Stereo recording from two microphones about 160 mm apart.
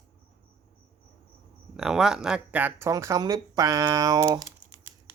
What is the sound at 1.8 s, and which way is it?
Speech, 5° right (ahead or behind).